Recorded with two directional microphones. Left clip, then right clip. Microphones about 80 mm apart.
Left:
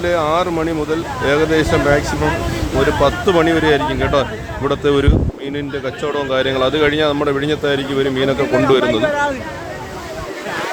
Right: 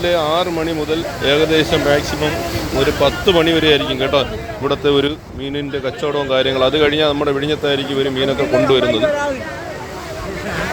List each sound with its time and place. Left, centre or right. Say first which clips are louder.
0.0 s speech: even; left
4.6 s a man's voice: even; left
5.5 s speech: right 2 dB; centre
7.1 s a man's voice: even; left
8.4 s speech: right 3 dB; centre
8.7 s speech: even; left
9.0 s speech: left 1 dB; centre